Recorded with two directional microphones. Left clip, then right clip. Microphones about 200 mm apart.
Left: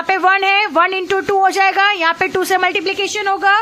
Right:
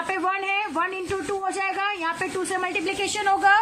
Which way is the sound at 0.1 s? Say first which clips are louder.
Left 13 dB; 45° left (ahead or behind).